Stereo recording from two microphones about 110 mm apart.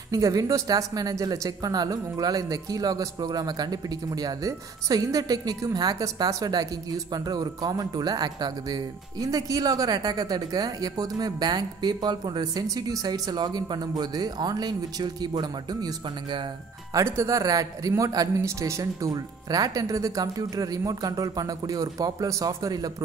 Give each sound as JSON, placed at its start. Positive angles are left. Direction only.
{"t": 0.1, "sound": "speech", "side_deg": -35}
{"t": 16.9, "sound": "speech", "side_deg": -30}